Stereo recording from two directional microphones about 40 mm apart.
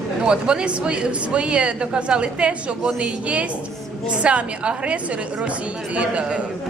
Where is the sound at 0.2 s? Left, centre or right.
Right.